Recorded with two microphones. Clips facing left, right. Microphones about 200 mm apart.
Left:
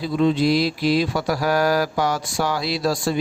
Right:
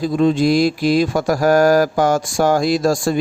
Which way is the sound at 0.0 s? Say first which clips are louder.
Right 4 dB; 45° right (ahead or behind).